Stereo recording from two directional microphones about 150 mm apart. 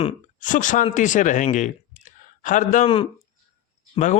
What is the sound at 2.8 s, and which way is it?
Speech, 35° left (ahead or behind).